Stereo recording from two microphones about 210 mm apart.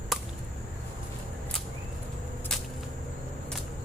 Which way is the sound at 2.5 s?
Centre (ahead or behind).